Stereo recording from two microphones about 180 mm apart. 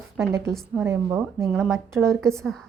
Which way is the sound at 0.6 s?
10° right (ahead or behind).